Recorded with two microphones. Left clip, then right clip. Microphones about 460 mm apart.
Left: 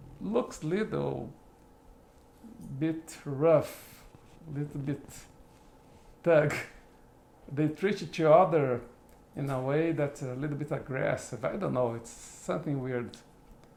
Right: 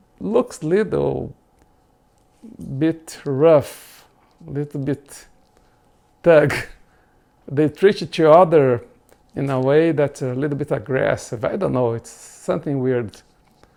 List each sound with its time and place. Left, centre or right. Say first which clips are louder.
0.2 s speech: right 12 dB; right
2.7 s speech: right 12 dB; right
6.2 s speech: right 11 dB; right